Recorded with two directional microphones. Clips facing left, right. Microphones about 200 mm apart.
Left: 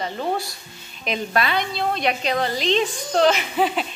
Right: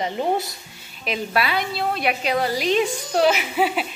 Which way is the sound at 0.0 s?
20° right (ahead or behind).